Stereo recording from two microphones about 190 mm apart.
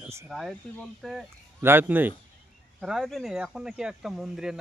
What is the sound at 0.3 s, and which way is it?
Speech, centre (ahead or behind).